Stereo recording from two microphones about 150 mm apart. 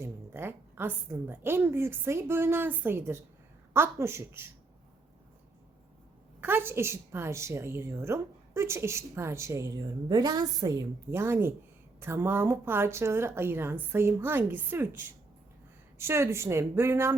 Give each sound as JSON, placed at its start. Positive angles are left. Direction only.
{"t": 0.0, "sound": "a woman's voice", "side_deg": -15}
{"t": 6.4, "sound": "a woman's voice", "side_deg": -15}